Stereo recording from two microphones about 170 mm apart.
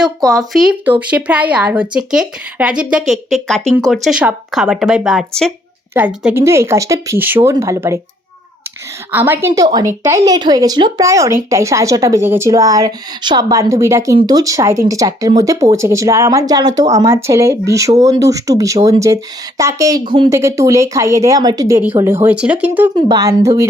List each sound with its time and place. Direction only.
0.3 s speech: centre (ahead or behind); by 7.9 s 15° right (ahead or behind)
9.1 s speech: 10° right (ahead or behind)
23.0 s speech: 25° right (ahead or behind)